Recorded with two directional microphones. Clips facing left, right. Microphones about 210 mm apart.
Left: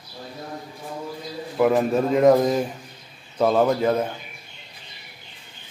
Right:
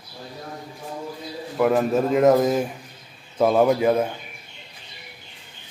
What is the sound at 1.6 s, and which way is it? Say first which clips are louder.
A man's voice: even; centre (ahead or behind).